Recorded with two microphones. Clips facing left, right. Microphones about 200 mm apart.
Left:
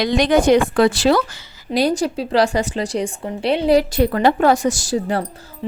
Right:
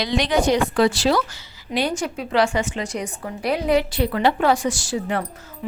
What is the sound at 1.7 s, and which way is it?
A woman's voice, 35° left (ahead or behind).